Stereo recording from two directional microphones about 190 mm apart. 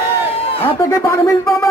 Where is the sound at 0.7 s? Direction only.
15° left (ahead or behind).